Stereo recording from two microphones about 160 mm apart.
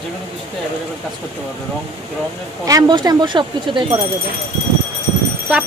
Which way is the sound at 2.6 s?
20° right (ahead or behind).